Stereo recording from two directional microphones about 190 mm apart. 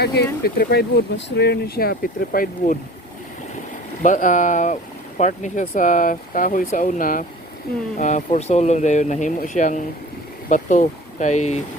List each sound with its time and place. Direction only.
0.0 s speech: 60° left (ahead or behind)
4.0 s speech: 40° left (ahead or behind)